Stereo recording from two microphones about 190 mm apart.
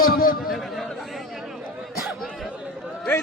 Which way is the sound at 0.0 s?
50° left (ahead or behind).